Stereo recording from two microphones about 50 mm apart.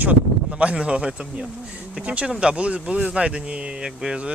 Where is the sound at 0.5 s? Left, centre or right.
Right.